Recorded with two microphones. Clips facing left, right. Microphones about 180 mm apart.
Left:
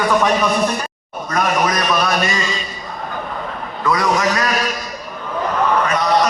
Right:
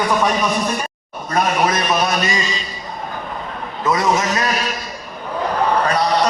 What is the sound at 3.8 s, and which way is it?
Speech, 25° right (ahead or behind).